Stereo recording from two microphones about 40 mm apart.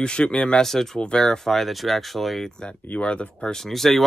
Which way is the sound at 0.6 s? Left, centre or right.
Centre.